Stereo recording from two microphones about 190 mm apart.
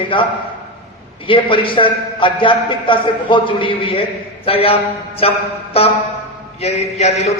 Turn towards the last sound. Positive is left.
turn(degrees=35)  # may be behind; listen again after turning